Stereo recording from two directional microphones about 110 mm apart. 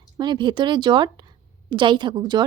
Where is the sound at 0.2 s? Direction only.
45° right (ahead or behind).